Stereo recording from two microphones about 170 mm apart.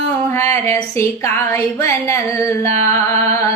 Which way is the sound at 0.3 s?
15° left (ahead or behind).